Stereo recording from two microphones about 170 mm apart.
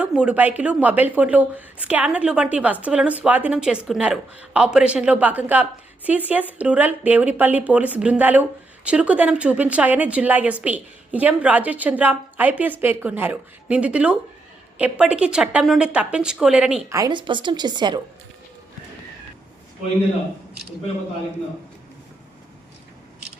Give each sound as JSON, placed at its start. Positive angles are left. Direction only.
{"t": 0.0, "sound": "a woman's voice", "side_deg": -5}
{"t": 16.9, "sound": "a woman's voice", "side_deg": -25}